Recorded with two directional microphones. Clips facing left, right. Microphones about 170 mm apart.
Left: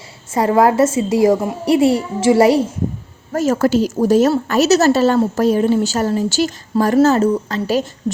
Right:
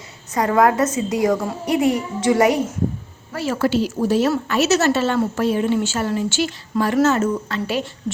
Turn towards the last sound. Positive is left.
turn(degrees=40)  # may be behind; listen again after turning